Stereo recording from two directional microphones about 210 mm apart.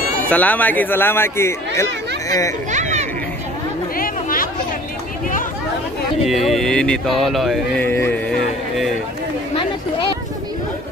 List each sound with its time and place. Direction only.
0.3 s a child's voice: 10° left (ahead or behind)
2.7 s children playing: 35° right (ahead or behind)
3.9 s chatter: 45° left (ahead or behind)
6.2 s speech: centre (ahead or behind)